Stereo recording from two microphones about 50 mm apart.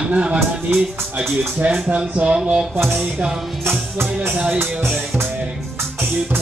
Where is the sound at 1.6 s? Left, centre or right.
Right.